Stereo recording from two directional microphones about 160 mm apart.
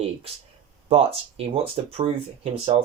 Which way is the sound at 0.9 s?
35° right (ahead or behind).